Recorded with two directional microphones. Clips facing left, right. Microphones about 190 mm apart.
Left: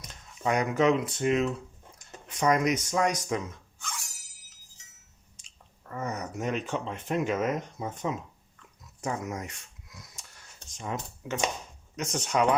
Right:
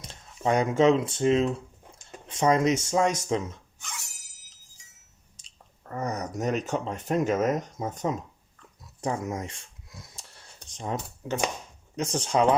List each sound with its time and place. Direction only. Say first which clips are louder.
0.0 s speech: right 3 dB; 30° right (ahead or behind)
5.9 s speech: right 3 dB; 40° right (ahead or behind)
9.0 s a sound: right 3 dB; 30° right (ahead or behind)
11.9 s speech: right 3 dB; 30° right (ahead or behind)